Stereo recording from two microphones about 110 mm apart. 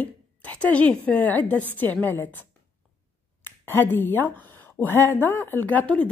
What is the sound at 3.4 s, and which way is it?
Speech, 20° left (ahead or behind).